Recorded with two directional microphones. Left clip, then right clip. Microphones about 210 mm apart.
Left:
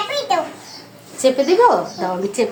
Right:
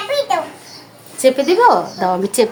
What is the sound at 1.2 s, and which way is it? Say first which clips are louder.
Speech: right 1 dB; 25° right (ahead or behind).